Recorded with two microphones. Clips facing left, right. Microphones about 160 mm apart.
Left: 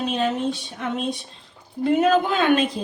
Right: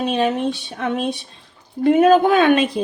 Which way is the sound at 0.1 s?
65° right (ahead or behind).